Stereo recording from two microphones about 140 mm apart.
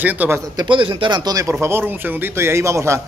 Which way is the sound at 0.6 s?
35° right (ahead or behind).